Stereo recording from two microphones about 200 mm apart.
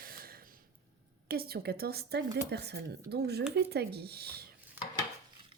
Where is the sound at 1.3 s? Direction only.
50° right (ahead or behind).